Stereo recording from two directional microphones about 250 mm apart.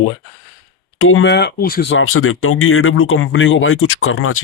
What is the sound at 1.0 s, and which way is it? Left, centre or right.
Speech, left.